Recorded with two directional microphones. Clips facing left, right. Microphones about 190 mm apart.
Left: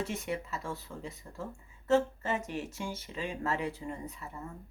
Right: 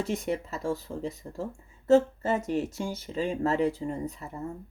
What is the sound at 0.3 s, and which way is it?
Speech, 35° right (ahead or behind).